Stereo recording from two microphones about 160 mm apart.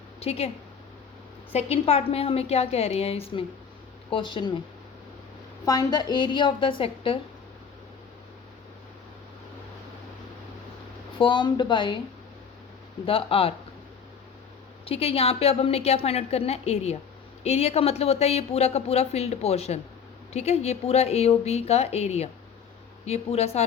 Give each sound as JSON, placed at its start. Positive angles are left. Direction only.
{"t": 0.2, "sound": "speech", "side_deg": 40}
{"t": 1.5, "sound": "speech", "side_deg": 40}
{"t": 5.6, "sound": "a woman's voice", "side_deg": 25}
{"t": 11.2, "sound": "a woman's voice", "side_deg": 30}
{"t": 13.1, "sound": "speech", "side_deg": 35}
{"t": 14.8, "sound": "speech", "side_deg": 35}